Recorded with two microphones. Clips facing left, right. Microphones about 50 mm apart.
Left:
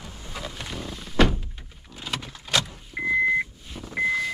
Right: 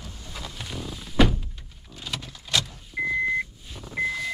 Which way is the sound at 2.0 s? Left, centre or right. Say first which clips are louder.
Left 2 dB; centre.